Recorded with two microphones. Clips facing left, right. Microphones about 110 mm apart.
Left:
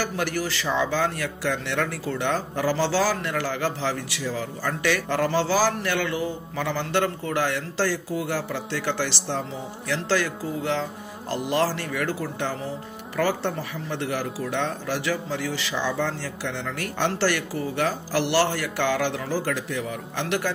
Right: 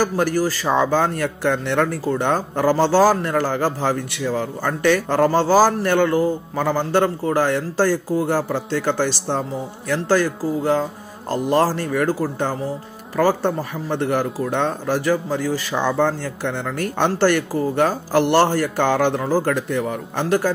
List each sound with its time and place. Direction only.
0.0 s a man's voice: 40° right (ahead or behind)